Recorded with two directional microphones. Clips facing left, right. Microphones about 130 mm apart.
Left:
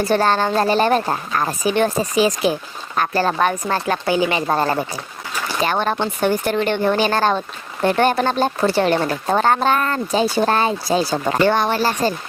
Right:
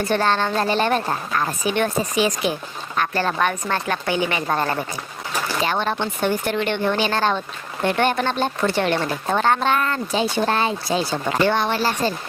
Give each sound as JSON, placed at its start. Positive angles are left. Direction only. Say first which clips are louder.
{"t": 0.0, "sound": "speech", "louder": "left 3 dB", "side_deg": 40}
{"t": 5.6, "sound": "speech", "louder": "left 5 dB", "side_deg": 45}